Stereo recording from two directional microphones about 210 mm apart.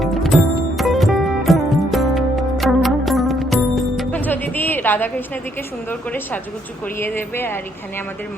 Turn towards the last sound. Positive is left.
turn(degrees=10)  # may be behind; listen again after turning